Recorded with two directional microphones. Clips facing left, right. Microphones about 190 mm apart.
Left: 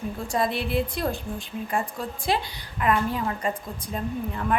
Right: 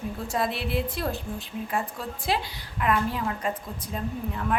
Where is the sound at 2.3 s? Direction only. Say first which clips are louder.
Left 2 dB; centre (ahead or behind).